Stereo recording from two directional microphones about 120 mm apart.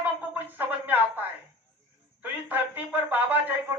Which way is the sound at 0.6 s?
15° right (ahead or behind).